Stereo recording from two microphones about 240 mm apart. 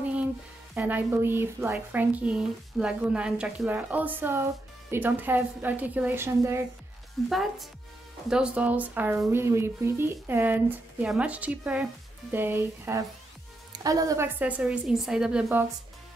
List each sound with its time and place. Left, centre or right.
0.7 s a woman's voice: centre
7.2 s a woman's voice: centre